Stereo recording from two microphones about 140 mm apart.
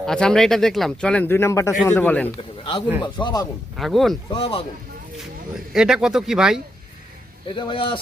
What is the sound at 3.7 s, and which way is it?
Speech, centre (ahead or behind).